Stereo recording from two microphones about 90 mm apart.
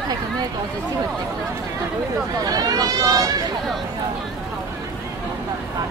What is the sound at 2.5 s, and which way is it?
Speech, 45° right (ahead or behind).